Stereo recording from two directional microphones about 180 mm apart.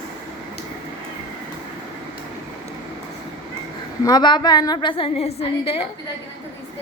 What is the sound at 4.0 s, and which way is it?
A woman's voice, 20° left (ahead or behind).